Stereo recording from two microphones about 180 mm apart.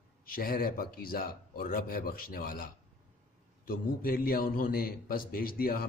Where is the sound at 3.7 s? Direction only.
55° left (ahead or behind).